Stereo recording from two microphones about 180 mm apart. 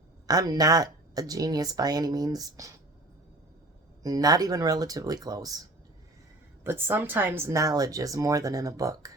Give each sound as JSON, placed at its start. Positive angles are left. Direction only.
{"t": 0.3, "sound": "speech", "side_deg": -20}
{"t": 4.0, "sound": "speech", "side_deg": -20}
{"t": 6.7, "sound": "speech", "side_deg": -10}